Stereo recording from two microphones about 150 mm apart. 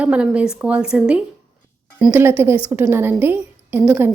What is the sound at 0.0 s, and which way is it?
A woman's voice, 10° right (ahead or behind).